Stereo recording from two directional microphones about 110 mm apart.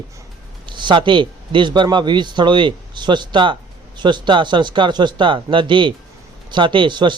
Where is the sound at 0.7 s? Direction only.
45° right (ahead or behind).